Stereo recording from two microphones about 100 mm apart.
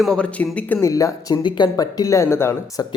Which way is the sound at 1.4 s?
50° left (ahead or behind).